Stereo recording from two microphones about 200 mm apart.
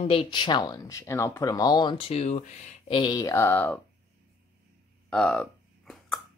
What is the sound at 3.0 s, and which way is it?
Speech, 20° left (ahead or behind).